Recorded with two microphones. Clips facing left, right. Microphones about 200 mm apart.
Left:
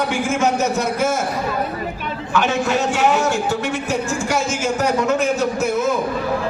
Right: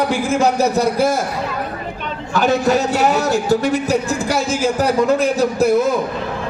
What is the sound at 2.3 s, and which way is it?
A man's voice, 35° right (ahead or behind).